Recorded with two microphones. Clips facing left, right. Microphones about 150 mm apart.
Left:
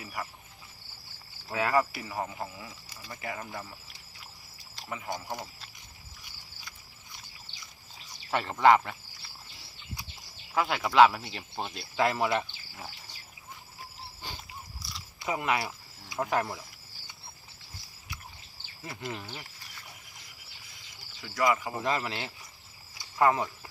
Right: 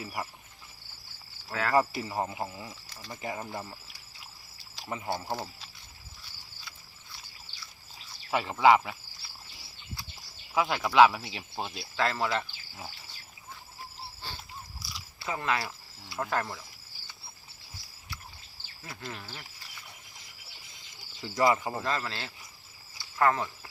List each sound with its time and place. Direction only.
0.0 s speech: 20° right (ahead or behind)
1.7 s speech: 25° right (ahead or behind)
4.9 s speech: 25° right (ahead or behind)
7.1 s a sound: 20° left (ahead or behind)
8.3 s speech: 5° right (ahead or behind)
10.5 s speech: centre (ahead or behind)
11.9 s speech: 15° left (ahead or behind)
14.2 s a sound: 15° left (ahead or behind)
14.8 s biting: centre (ahead or behind)
15.2 s speech: 15° left (ahead or behind)
19.0 s speech: 15° left (ahead or behind)
21.2 s speech: 25° right (ahead or behind)
21.8 s speech: 15° left (ahead or behind)
23.0 s cricket: 15° left (ahead or behind)